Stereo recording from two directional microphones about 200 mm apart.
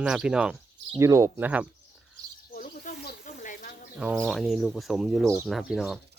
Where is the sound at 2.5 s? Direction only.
45° left (ahead or behind).